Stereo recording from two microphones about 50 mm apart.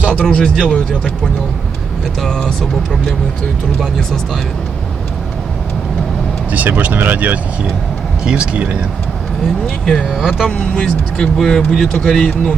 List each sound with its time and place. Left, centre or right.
0.2 s speech: centre
2.2 s speech: centre
3.8 s speech: centre
6.5 s speech: right
8.2 s speech: centre
10.2 s speech: centre
10.5 s speech: left